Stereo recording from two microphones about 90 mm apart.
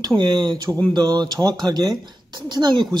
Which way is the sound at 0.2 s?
50° right (ahead or behind).